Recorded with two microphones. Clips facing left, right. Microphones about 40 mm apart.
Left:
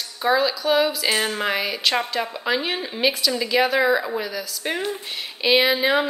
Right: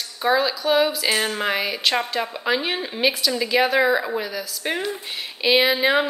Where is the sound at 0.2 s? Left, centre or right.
Centre.